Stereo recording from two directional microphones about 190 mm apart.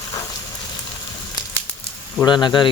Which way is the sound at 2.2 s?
25° left (ahead or behind).